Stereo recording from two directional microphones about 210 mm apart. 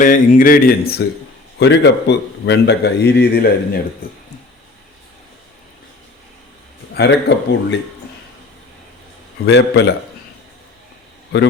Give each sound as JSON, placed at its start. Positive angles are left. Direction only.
{"t": 0.0, "sound": "a man's voice", "side_deg": 40}
{"t": 6.9, "sound": "a man's voice", "side_deg": 55}
{"t": 9.5, "sound": "a man's voice", "side_deg": 55}